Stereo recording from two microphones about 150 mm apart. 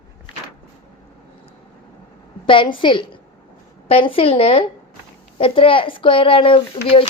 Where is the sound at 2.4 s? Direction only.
35° left (ahead or behind).